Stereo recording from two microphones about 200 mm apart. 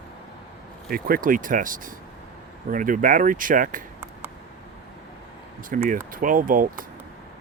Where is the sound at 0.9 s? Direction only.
45° right (ahead or behind).